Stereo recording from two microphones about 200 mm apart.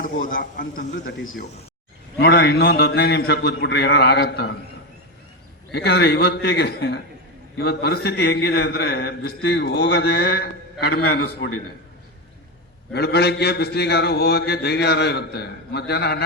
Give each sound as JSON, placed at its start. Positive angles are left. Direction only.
{"t": 0.0, "sound": "a man's voice", "side_deg": 45}
{"t": 2.1, "sound": "mantra", "side_deg": 55}
{"t": 5.7, "sound": "mantra", "side_deg": 55}
{"t": 11.3, "sound": "a man's voice", "side_deg": 70}
{"t": 12.9, "sound": "mantra", "side_deg": 55}